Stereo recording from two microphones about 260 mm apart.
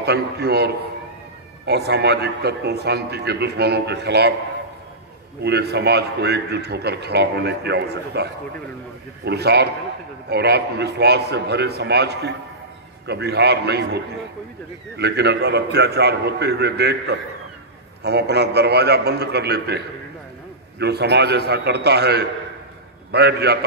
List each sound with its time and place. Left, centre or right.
0.0 s a man's voice: right
5.4 s a man's voice: right
15.0 s a man's voice: right
20.8 s a man's voice: right